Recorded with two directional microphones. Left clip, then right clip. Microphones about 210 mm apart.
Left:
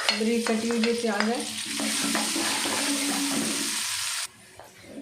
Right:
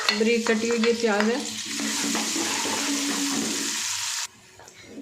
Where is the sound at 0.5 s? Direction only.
40° right (ahead or behind).